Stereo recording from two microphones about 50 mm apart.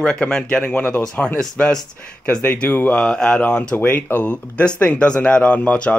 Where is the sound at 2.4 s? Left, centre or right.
Left.